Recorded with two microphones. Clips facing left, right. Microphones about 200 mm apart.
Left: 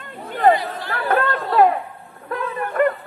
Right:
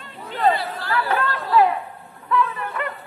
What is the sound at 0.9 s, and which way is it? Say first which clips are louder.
Chatter: left 3 dB; 50° left (ahead or behind).